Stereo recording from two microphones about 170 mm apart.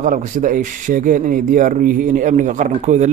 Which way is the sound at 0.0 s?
50° right (ahead or behind).